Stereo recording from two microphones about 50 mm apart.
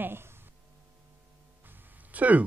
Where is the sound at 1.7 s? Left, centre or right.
Right.